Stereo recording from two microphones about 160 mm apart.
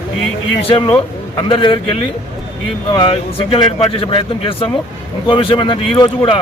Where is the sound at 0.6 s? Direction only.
35° left (ahead or behind).